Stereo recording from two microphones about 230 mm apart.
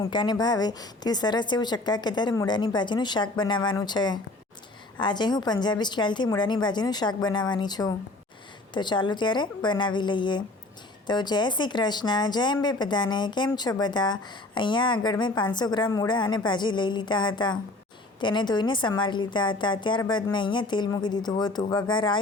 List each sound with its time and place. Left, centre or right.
0.0 s speech: centre